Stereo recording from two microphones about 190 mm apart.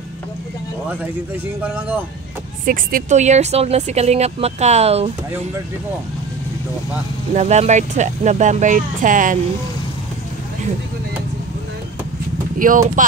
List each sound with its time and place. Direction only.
1.6 s speech: 10° right (ahead or behind)
2.6 s speech: 45° right (ahead or behind)
7.3 s speech: 35° right (ahead or behind)
12.5 s speech: 45° right (ahead or behind)